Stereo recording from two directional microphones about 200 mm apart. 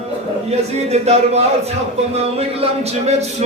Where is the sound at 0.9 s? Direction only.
30° right (ahead or behind).